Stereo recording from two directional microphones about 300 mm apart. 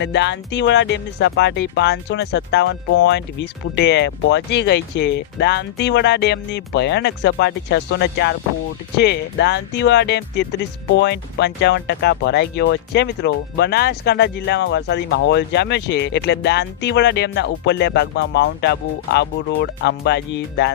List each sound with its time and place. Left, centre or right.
0.0 s speech: left